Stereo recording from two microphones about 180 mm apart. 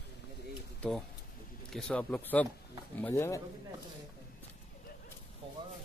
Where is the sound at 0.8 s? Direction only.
Centre (ahead or behind).